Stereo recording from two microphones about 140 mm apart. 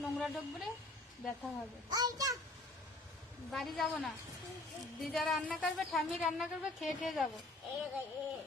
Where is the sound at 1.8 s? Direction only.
30° right (ahead or behind).